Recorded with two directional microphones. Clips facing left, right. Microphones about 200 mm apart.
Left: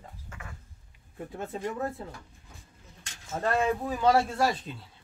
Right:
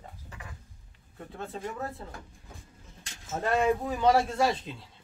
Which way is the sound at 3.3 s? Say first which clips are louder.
Right 1 dB; 5° right (ahead or behind).